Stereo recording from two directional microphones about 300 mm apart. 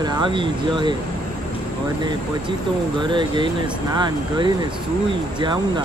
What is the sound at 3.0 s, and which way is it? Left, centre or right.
Speech, centre.